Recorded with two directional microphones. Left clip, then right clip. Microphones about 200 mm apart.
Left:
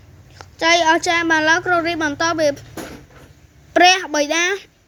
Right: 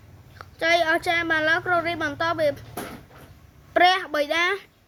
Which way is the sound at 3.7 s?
20° left (ahead or behind).